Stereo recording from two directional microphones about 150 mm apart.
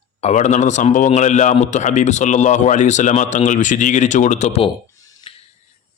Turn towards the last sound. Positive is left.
turn(degrees=45)  # may be behind; listen again after turning